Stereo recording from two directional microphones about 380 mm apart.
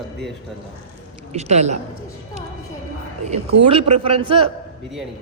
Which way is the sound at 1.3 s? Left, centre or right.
Centre.